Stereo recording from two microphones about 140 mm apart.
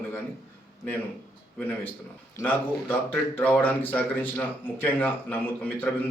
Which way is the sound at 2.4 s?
15° left (ahead or behind).